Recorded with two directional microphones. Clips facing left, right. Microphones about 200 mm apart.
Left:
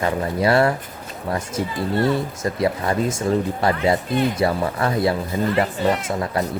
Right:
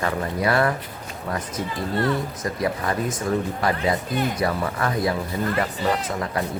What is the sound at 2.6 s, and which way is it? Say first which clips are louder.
Speech: left 4 dB; 30° left (ahead or behind).